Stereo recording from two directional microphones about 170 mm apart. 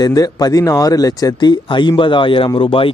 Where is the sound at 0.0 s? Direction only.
20° left (ahead or behind).